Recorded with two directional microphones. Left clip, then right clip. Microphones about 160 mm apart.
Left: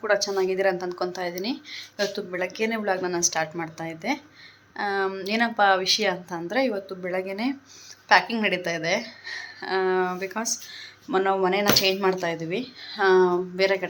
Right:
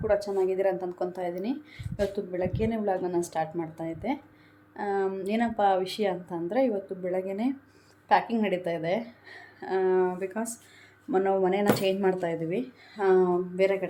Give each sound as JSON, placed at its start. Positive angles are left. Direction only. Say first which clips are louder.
{"t": 0.3, "sound": "speech", "louder": "left 3 dB", "side_deg": -10}